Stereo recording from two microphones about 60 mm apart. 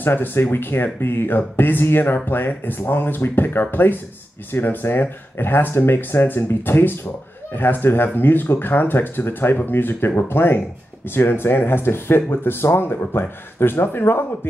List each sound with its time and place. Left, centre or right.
0.0 s speech: left